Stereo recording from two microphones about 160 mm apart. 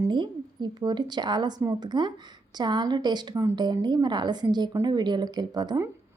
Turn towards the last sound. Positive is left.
turn(degrees=-25)  # may be behind; listen again after turning